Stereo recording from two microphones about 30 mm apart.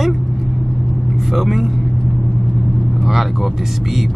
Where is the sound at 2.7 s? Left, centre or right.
Left.